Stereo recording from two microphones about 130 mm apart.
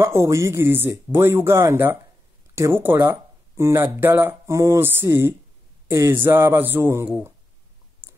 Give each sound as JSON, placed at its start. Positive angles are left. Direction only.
{"t": 0.0, "sound": "speech", "side_deg": -20}